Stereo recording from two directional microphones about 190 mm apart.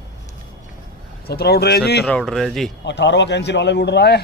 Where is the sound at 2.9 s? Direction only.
65° left (ahead or behind).